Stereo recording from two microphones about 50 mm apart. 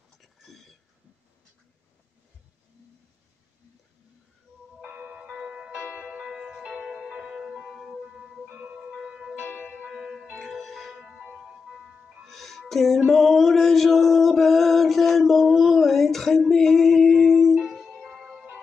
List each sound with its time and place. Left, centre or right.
0.2 s whispering: centre
4.9 s music: right
7.6 s music: centre
8.5 s music: right
8.9 s music: centre
9.4 s music: left
9.9 s music: centre
11.2 s ice cream truck: centre
12.3 s music: centre